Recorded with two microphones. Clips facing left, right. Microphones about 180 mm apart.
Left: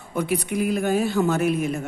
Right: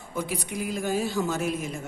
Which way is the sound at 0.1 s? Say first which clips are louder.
Left 7 dB; 60° left (ahead or behind).